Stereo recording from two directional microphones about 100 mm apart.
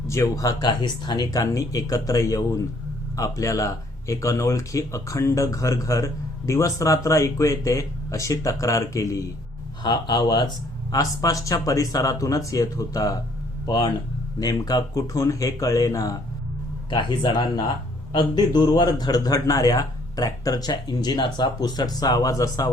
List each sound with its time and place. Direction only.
0.1 s speech: 30° left (ahead or behind)
9.8 s speech: 45° left (ahead or behind)
10.9 s speech: 35° left (ahead or behind)
13.7 s speech: 50° left (ahead or behind)
14.3 s speech: 40° left (ahead or behind)
16.9 s speech: 50° left (ahead or behind)